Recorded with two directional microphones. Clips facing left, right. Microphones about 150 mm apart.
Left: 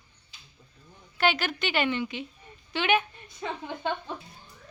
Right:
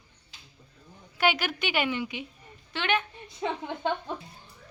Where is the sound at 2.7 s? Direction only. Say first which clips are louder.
Left 3 dB; 5° left (ahead or behind).